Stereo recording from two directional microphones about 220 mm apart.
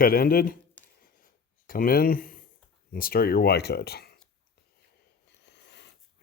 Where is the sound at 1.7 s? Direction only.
40° left (ahead or behind).